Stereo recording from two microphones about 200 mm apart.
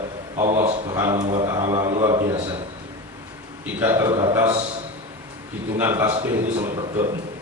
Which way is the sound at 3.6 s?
10° right (ahead or behind).